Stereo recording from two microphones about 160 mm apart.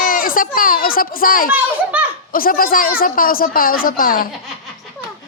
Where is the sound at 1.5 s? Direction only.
10° right (ahead or behind).